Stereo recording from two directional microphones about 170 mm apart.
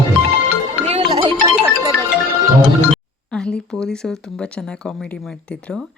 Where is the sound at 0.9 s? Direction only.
35° right (ahead or behind).